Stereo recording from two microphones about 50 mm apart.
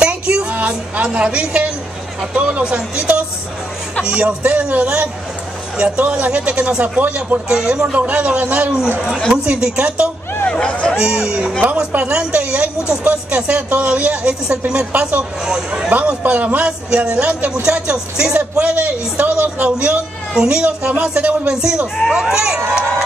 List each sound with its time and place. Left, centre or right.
0.0 s a sound: right
1.0 s a woman's voice: right
6.8 s a woman's voice: right
7.4 s speech: centre
7.9 s a woman's voice: right
10.5 s speech: centre
11.0 s a woman's voice: centre
15.4 s speech: centre
15.9 s a man's voice: right
16.6 s a woman's voice: centre
18.4 s a man's voice: right
22.1 s speech: centre